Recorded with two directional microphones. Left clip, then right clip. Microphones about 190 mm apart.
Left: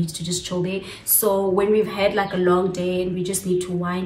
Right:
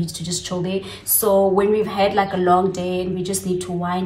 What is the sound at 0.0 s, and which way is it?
A woman's voice, 15° right (ahead or behind).